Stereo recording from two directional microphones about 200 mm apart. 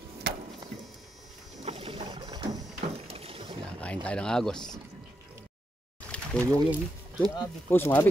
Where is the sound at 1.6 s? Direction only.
30° right (ahead or behind).